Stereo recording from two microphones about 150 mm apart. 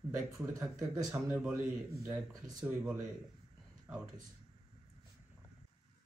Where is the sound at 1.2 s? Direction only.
10° right (ahead or behind).